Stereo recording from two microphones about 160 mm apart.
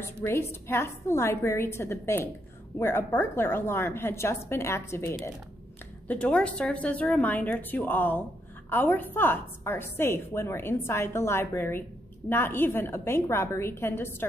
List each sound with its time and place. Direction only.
0.0 s a woman's voice: 15° left (ahead or behind)